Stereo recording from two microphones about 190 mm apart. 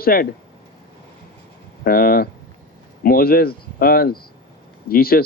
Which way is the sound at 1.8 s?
50° left (ahead or behind).